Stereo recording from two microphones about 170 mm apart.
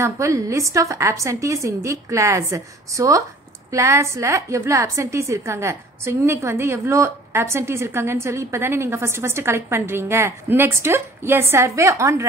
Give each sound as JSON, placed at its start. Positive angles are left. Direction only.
{"t": 0.0, "sound": "a woman's voice", "side_deg": -15}